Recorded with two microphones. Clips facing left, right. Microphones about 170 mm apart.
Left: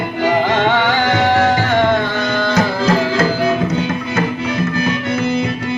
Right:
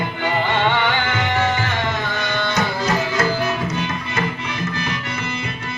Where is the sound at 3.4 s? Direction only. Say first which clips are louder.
Left 6 dB; 55° left (ahead or behind).